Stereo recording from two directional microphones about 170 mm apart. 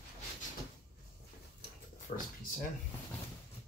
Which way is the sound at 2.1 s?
45° left (ahead or behind).